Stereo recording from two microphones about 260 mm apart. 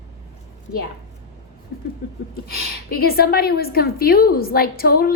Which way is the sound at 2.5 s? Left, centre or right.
Left.